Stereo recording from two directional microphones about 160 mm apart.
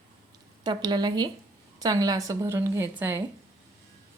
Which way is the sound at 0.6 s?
25° right (ahead or behind).